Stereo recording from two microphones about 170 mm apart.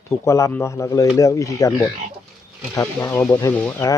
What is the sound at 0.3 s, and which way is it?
Speech, 15° left (ahead or behind).